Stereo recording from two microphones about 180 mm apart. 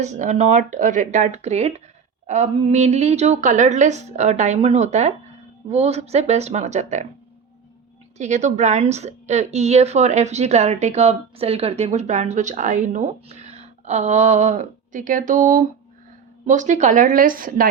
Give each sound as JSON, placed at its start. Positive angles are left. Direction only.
{"t": 0.0, "sound": "a woman's voice", "side_deg": -40}
{"t": 8.2, "sound": "a woman's voice", "side_deg": -40}